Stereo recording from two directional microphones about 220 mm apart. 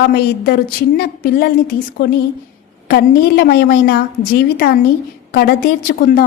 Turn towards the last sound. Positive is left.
turn(degrees=45)  # may be behind; listen again after turning